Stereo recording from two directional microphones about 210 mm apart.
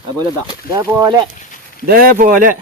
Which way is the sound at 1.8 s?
45° right (ahead or behind).